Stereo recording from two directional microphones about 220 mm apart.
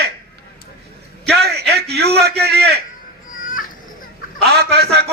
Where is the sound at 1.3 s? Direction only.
45° right (ahead or behind).